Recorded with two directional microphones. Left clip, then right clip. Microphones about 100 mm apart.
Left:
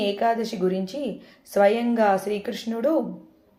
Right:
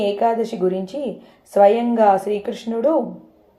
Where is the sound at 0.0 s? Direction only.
30° right (ahead or behind).